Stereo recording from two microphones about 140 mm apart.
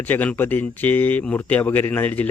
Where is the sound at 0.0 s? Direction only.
10° left (ahead or behind).